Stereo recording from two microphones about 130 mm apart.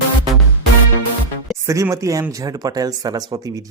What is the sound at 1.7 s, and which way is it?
Speech, 25° right (ahead or behind).